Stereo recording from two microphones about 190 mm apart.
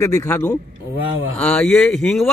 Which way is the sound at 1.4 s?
5° left (ahead or behind).